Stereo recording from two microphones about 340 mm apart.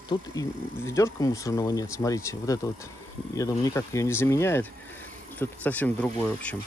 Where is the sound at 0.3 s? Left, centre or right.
Centre.